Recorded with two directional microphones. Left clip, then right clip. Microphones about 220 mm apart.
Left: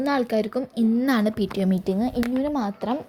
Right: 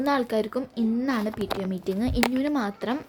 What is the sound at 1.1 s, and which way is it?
Speech, 20° left (ahead or behind).